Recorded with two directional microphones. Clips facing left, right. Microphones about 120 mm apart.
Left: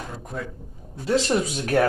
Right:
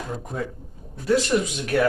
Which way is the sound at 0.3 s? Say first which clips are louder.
Right 2 dB; 15° right (ahead or behind).